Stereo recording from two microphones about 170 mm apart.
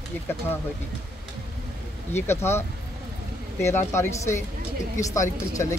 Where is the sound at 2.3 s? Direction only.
15° left (ahead or behind).